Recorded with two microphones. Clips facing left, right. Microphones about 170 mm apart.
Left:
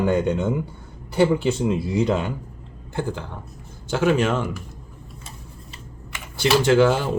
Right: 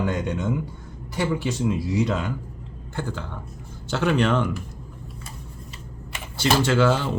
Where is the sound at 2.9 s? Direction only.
15° left (ahead or behind).